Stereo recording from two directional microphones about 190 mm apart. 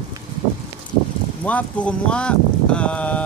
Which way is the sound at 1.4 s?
10° left (ahead or behind).